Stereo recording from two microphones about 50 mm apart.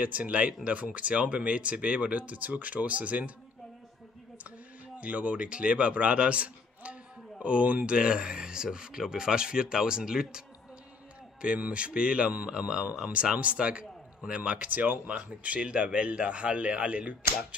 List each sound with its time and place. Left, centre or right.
0.0 s a man's voice: right
5.0 s a man's voice: right
11.4 s a man's voice: right